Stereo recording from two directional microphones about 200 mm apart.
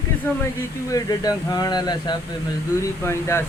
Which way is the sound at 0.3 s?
10° left (ahead or behind).